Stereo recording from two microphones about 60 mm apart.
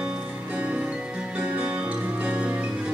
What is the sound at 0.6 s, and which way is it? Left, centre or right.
Music, right.